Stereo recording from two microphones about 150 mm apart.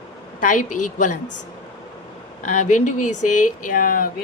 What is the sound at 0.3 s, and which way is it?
Speech, 60° left (ahead or behind).